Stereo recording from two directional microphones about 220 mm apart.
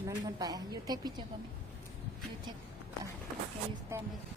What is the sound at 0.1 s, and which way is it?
A woman's voice, 15° right (ahead or behind).